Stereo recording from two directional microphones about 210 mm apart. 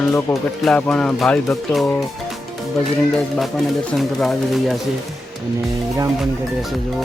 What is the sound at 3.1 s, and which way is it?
Speech, 5° left (ahead or behind).